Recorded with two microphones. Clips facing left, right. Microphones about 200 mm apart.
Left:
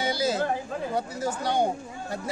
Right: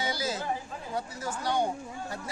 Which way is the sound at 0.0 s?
30° left (ahead or behind).